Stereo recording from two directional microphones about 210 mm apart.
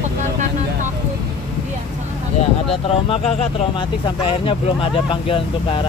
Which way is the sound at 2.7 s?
25° left (ahead or behind).